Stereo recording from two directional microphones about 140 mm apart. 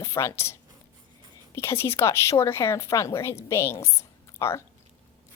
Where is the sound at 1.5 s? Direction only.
20° left (ahead or behind).